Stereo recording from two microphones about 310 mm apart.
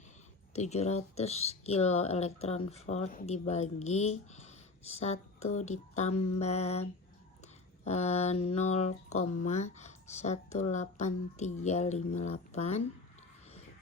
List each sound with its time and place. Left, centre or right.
0.5 s speech: left
7.9 s speech: left